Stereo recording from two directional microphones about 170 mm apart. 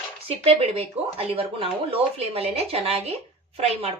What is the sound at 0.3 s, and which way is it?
A woman's voice, 35° right (ahead or behind).